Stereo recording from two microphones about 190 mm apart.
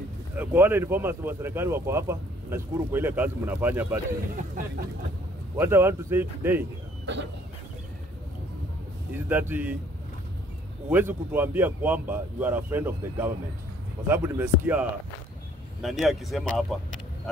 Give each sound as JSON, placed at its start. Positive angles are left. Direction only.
{"t": 0.4, "sound": "speech", "side_deg": -10}
{"t": 4.6, "sound": "speech", "side_deg": -45}
{"t": 5.6, "sound": "speech", "side_deg": -10}
{"t": 9.1, "sound": "speech", "side_deg": -10}
{"t": 10.9, "sound": "speech", "side_deg": -10}